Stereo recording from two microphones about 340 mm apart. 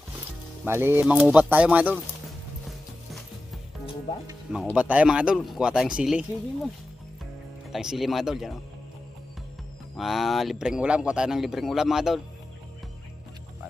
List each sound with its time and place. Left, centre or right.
0.7 s speech: centre
4.3 s speech: centre
7.7 s speech: centre
9.9 s speech: centre